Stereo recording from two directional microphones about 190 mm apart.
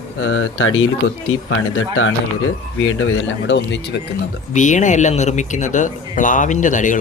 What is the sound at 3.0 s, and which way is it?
Speech, 75° left (ahead or behind).